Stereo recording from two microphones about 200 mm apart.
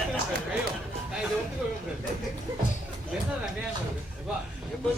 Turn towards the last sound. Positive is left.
turn(degrees=-5)  # may be behind; listen again after turning